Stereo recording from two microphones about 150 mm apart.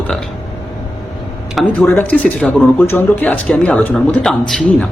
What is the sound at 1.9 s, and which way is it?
A man's voice, 10° left (ahead or behind).